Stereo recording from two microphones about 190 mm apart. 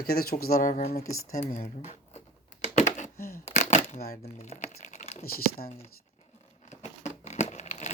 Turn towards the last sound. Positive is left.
turn(degrees=40)  # may be behind; listen again after turning